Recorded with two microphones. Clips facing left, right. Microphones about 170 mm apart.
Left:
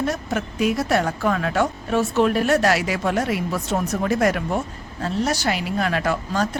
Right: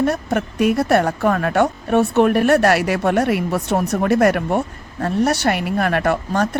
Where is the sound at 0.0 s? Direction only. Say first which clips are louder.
Right 5 dB; 55° right (ahead or behind).